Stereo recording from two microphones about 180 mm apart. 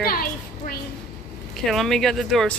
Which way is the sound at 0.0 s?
55° left (ahead or behind).